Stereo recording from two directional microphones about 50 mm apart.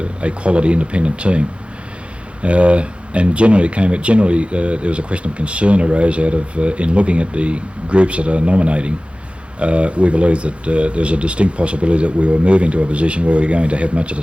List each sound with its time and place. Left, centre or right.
0.0 s speech: right